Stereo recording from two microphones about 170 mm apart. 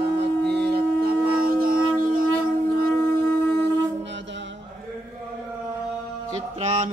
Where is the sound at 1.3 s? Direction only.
60° right (ahead or behind).